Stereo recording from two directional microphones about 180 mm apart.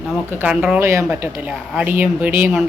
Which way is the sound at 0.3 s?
10° right (ahead or behind).